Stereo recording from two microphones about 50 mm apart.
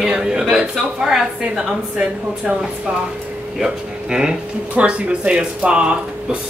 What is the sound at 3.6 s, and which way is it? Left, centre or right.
Speech, centre.